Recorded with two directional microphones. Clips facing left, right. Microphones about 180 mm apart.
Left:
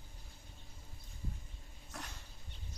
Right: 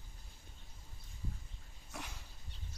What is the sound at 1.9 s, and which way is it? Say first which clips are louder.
Dog: right 1 dB; 5° right (ahead or behind).